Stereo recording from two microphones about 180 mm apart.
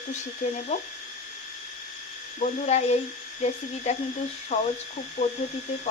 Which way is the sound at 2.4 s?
40° left (ahead or behind).